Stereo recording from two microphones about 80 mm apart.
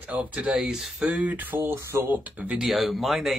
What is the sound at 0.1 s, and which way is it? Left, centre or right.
Speech, centre.